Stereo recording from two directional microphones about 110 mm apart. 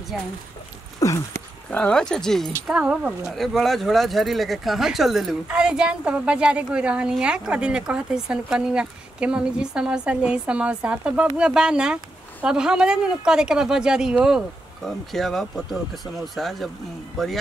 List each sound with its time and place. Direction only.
0.1 s speech: 5° right (ahead or behind)
0.9 s a sound: 30° left (ahead or behind)
1.7 s speech: 10° left (ahead or behind)
2.7 s speech: 10° right (ahead or behind)